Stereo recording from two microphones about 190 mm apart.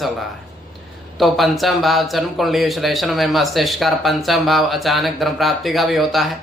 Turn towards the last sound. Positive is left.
turn(degrees=0)  # may be behind; listen again after turning